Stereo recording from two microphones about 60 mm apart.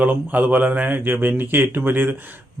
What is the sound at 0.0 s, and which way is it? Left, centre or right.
Speech, right.